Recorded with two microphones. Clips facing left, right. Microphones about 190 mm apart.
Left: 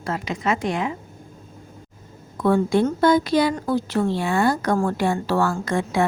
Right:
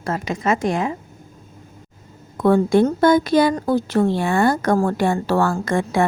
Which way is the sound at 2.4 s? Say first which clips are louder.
Right 4 dB; 50° right (ahead or behind).